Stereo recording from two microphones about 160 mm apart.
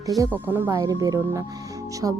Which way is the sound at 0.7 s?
25° right (ahead or behind).